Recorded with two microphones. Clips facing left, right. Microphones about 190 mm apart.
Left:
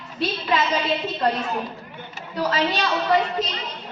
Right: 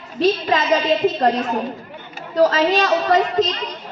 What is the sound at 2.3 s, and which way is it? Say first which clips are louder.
A woman's voice: right 8 dB; 40° right (ahead or behind).